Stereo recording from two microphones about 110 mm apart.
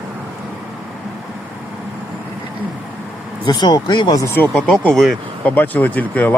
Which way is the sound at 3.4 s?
40° left (ahead or behind).